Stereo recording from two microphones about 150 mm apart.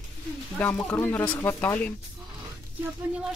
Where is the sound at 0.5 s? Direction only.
15° left (ahead or behind).